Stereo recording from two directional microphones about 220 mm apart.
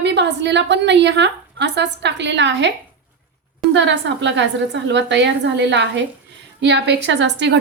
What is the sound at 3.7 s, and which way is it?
A woman's voice, 55° right (ahead or behind).